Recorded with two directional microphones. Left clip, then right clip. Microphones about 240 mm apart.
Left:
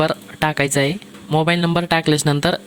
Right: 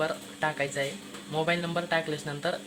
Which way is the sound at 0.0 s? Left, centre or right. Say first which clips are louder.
Left 10 dB; left.